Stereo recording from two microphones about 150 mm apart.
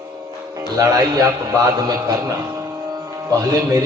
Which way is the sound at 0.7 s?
25° right (ahead or behind).